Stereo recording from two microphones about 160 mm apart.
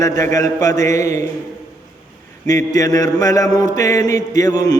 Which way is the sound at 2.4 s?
20° left (ahead or behind).